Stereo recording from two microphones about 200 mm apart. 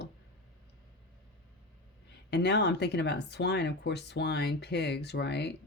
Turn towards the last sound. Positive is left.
turn(degrees=55)  # may be behind; listen again after turning